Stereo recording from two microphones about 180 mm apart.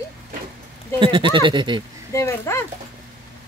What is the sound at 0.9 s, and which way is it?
Speech, 25° right (ahead or behind).